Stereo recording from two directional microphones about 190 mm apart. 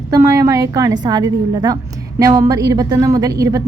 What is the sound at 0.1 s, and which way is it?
Speech, 15° right (ahead or behind).